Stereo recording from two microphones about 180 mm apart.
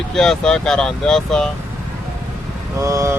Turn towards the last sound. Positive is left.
turn(degrees=-15)  # may be behind; listen again after turning